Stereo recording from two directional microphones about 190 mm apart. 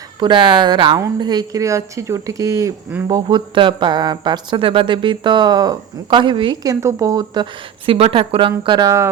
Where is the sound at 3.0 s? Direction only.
25° right (ahead or behind).